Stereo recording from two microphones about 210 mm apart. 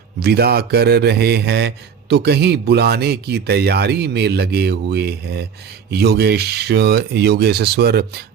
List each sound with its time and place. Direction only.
0.2 s a man's voice: 50° right (ahead or behind)